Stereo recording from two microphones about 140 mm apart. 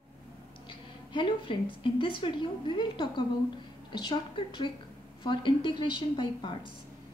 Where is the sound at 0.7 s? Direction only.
35° left (ahead or behind).